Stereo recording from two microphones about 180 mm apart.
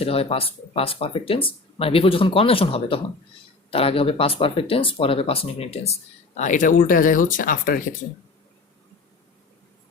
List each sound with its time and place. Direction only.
0.0 s speech: 35° left (ahead or behind); by 7.8 s 50° left (ahead or behind)